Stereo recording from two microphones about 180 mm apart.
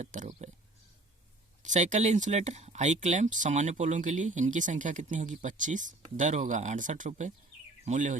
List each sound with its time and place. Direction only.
0.0 s speech: 40° right (ahead or behind)
1.6 s speech: 40° right (ahead or behind)